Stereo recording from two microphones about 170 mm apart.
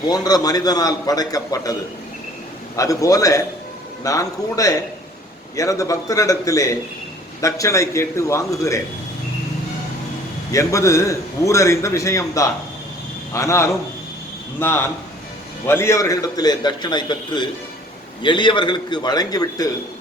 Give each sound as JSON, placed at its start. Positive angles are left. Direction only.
{"t": 0.1, "sound": "a man's voice", "side_deg": 25}
{"t": 2.7, "sound": "a man's voice", "side_deg": 20}
{"t": 10.5, "sound": "a man's voice", "side_deg": 20}